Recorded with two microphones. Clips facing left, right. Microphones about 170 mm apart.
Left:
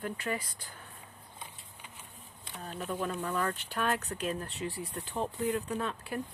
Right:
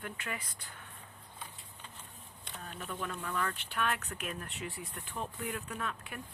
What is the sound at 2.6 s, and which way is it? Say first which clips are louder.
Speech: left 6 dB; 35° left (ahead or behind).